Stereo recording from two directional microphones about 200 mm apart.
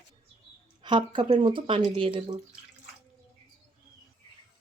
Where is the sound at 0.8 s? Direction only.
25° right (ahead or behind).